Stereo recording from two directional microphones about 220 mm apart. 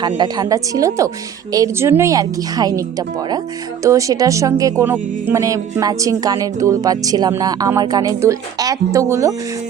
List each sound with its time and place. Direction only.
0.0 s speech: 20° right (ahead or behind)
3.8 s speech: 15° right (ahead or behind)